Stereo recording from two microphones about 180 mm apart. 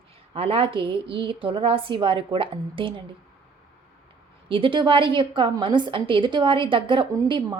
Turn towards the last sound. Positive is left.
turn(degrees=-25)  # may be behind; listen again after turning